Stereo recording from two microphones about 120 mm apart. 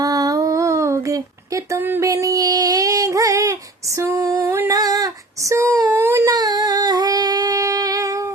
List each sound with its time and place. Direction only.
0.0 s humming: 30° right (ahead or behind)
2.0 s a sound: 30° right (ahead or behind)
3.9 s female singing: 25° right (ahead or behind)
6.3 s humming: 35° right (ahead or behind)